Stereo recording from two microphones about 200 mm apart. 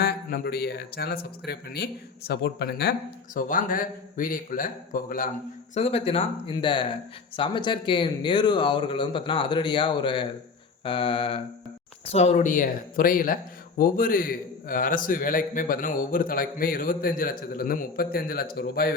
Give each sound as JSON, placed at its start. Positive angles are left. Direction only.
{"t": 0.0, "sound": "speech", "side_deg": 50}
{"t": 3.3, "sound": "speech", "side_deg": 40}
{"t": 5.7, "sound": "speech", "side_deg": 30}